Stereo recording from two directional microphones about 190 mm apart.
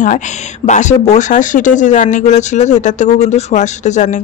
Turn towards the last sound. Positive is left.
turn(degrees=40)  # may be behind; listen again after turning